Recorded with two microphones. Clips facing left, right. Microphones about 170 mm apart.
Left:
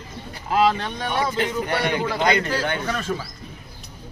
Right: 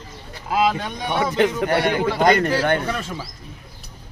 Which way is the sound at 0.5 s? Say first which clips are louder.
Left 1 dB; 10° right (ahead or behind).